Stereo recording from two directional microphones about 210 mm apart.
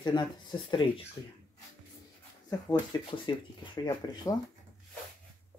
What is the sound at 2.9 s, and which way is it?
Speech, 20° left (ahead or behind).